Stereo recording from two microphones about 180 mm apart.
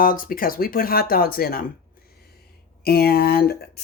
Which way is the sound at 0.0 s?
50° left (ahead or behind).